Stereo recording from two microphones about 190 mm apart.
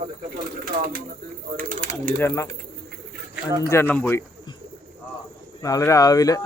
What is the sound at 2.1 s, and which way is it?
Speech, 15° left (ahead or behind).